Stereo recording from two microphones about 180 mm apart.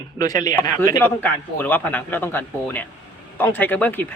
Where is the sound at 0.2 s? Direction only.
20° left (ahead or behind).